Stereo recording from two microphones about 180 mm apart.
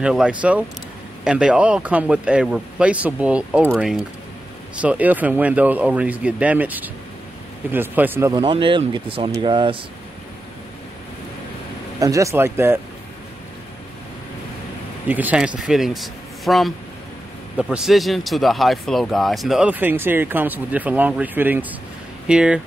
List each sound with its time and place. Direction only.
0.0 s speech: 5° right (ahead or behind)
8.4 s speech: 25° right (ahead or behind)
12.0 s speech: 15° right (ahead or behind)
15.0 s speech: 10° right (ahead or behind)